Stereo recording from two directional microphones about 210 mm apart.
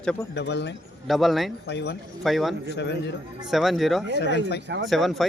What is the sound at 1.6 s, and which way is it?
Speech, 50° left (ahead or behind).